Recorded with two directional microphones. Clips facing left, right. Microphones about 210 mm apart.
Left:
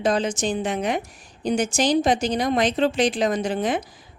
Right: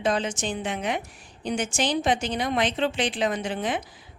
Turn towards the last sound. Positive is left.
turn(degrees=40)  # may be behind; listen again after turning